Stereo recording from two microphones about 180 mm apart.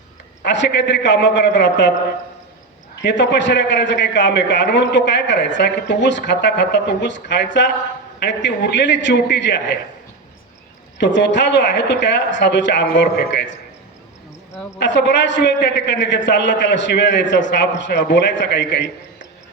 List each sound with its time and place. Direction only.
0.4 s a man's voice: 80° left
3.0 s a man's voice: 80° left
11.0 s a man's voice: 80° left
14.8 s a man's voice: 80° left